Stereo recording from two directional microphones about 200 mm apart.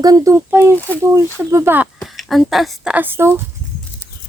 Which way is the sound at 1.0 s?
15° right (ahead or behind).